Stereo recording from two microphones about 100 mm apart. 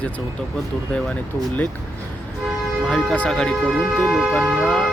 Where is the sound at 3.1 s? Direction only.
10° left (ahead or behind).